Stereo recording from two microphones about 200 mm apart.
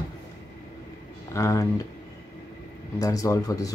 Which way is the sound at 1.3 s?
15° left (ahead or behind).